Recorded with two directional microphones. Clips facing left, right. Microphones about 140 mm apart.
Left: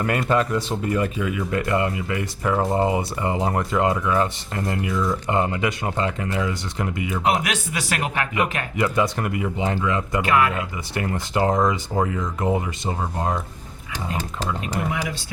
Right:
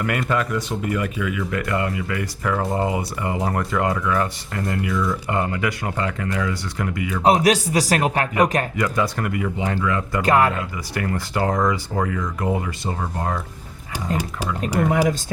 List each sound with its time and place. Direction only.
0.0 s speech: 30° left (ahead or behind)
7.3 s a man's voice: 35° right (ahead or behind)
8.8 s speech: 20° left (ahead or behind)
10.2 s a man's voice: 40° right (ahead or behind)
10.9 s speech: 20° left (ahead or behind)
14.8 s a man's voice: 40° right (ahead or behind)